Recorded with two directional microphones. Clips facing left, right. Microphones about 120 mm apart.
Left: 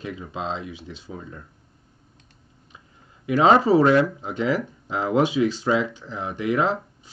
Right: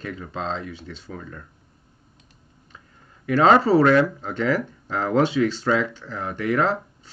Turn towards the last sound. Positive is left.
turn(degrees=15)  # may be behind; listen again after turning